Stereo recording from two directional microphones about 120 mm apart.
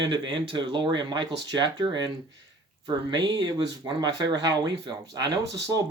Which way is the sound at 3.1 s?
35° right (ahead or behind).